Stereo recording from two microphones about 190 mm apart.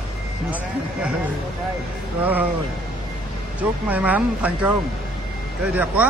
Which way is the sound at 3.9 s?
10° right (ahead or behind).